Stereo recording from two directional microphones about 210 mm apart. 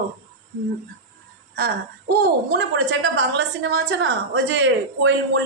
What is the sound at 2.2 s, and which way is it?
A woman's voice, 55° right (ahead or behind).